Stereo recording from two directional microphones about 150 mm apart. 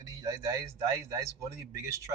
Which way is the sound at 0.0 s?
25° right (ahead or behind).